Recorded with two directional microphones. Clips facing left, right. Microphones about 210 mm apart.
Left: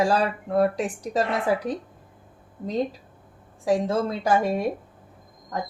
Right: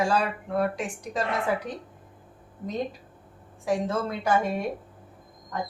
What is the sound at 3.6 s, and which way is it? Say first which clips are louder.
Speech: left 4 dB; 35° left (ahead or behind).